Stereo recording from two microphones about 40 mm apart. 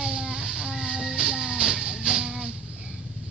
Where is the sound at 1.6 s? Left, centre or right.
Centre.